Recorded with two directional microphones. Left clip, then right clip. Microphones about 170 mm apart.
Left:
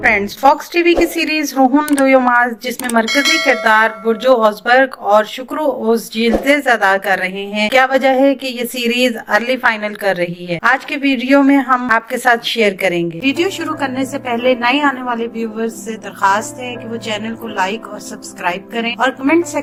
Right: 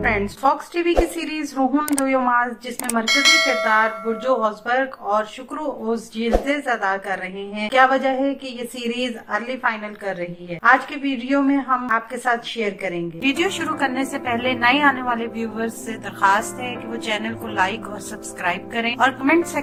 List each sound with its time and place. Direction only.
0.0 s a woman's voice: 30° left (ahead or behind)
3.1 s bell: centre (ahead or behind)
3.7 s speech: 35° left (ahead or behind)
13.2 s a woman's voice: 15° left (ahead or behind)